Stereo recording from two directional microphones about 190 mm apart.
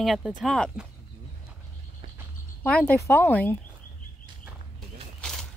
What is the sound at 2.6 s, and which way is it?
Speech, 10° left (ahead or behind).